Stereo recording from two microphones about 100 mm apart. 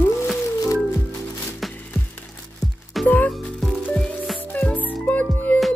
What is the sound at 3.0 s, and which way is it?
Music, 15° left (ahead or behind).